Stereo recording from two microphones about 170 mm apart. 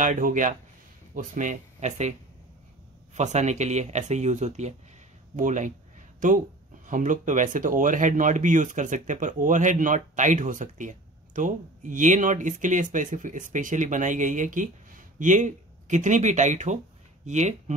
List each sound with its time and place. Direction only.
0.0 s speech: 50° right (ahead or behind)
3.2 s speech: 45° right (ahead or behind)